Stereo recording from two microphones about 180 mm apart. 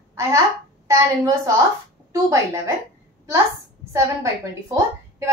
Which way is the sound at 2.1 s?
15° right (ahead or behind).